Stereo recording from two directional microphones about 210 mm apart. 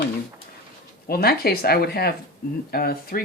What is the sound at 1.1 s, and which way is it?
Speech, 45° left (ahead or behind).